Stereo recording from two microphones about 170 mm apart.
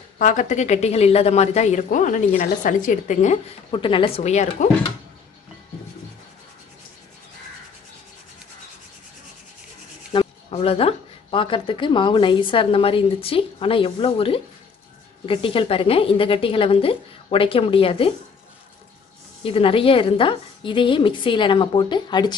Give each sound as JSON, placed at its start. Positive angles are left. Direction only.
{"t": 0.2, "sound": "speech", "side_deg": 50}
{"t": 3.7, "sound": "speech", "side_deg": 30}
{"t": 10.1, "sound": "speech", "side_deg": 35}
{"t": 19.4, "sound": "a woman's voice", "side_deg": 35}